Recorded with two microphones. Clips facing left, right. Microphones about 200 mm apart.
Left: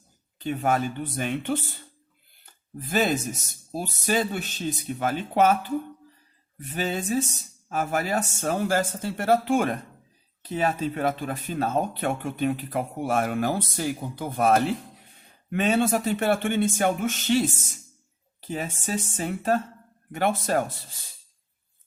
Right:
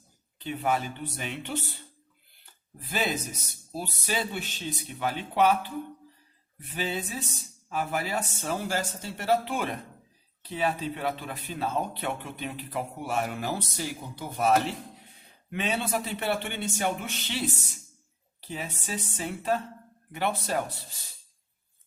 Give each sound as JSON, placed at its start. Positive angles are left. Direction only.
{"t": 0.3, "sound": "speech", "side_deg": 45}
{"t": 2.8, "sound": "speech", "side_deg": 45}
{"t": 6.7, "sound": "speech", "side_deg": 45}